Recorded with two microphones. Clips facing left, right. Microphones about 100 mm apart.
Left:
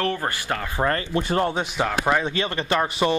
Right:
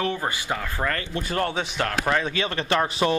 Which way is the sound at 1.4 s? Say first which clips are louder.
Left 2 dB; 10° left (ahead or behind).